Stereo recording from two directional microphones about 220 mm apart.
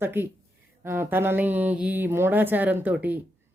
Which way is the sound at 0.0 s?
10° right (ahead or behind).